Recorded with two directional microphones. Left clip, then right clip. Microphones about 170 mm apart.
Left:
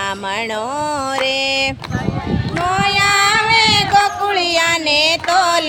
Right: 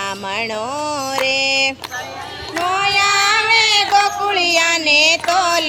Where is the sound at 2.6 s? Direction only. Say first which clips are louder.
Even; 5° left (ahead or behind).